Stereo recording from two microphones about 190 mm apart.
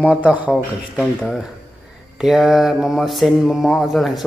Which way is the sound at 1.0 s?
Centre (ahead or behind).